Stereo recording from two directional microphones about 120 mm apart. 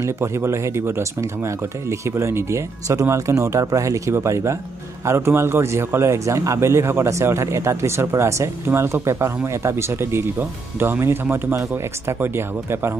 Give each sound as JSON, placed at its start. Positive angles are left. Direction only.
{"t": 0.0, "sound": "a man's voice", "side_deg": -20}